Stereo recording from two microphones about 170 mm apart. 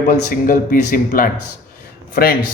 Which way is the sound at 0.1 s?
55° left (ahead or behind).